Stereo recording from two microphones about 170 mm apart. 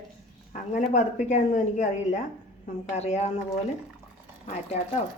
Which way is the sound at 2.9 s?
40° left (ahead or behind).